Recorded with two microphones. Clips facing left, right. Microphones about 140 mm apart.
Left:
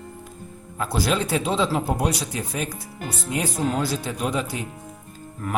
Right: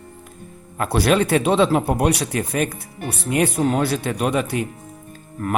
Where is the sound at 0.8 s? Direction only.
65° right (ahead or behind).